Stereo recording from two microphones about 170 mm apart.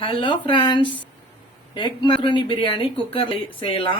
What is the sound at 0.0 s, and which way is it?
Speech, 30° left (ahead or behind).